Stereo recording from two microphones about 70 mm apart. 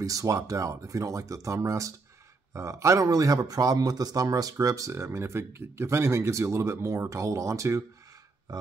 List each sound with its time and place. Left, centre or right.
0.0 s speech: right